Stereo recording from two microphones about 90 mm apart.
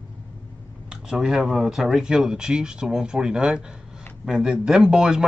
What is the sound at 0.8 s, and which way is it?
Speech, 5° right (ahead or behind).